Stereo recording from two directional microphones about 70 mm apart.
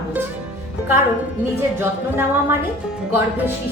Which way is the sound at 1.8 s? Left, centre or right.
Right.